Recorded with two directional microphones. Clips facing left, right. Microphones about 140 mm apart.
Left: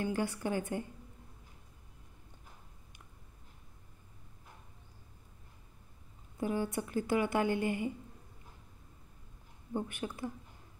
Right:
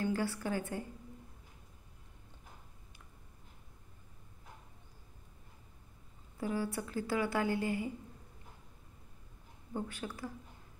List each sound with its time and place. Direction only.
0.0 s a woman's voice: 15° left (ahead or behind)
6.4 s a woman's voice: 20° left (ahead or behind)
9.8 s a woman's voice: 20° left (ahead or behind)